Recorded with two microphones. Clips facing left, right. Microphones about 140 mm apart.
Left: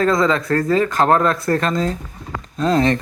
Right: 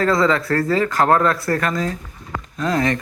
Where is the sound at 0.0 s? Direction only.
20° left (ahead or behind).